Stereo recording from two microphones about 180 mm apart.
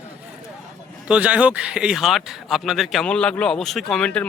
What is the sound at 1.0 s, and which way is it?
Speech, 5° right (ahead or behind).